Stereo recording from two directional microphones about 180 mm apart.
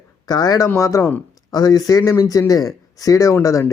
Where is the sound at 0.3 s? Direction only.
20° left (ahead or behind).